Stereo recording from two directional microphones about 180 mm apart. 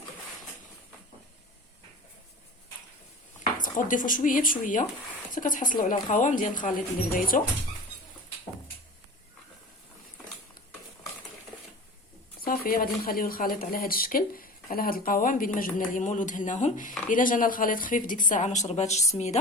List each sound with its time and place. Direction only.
3.6 s speech: 45° left (ahead or behind)
12.4 s speech: 55° left (ahead or behind); by 19.4 s 40° left (ahead or behind)